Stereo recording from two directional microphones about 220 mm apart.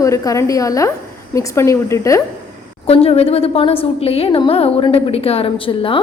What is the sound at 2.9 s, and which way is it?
A woman's voice, 25° left (ahead or behind).